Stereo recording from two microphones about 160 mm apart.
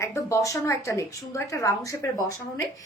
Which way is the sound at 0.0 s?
15° left (ahead or behind).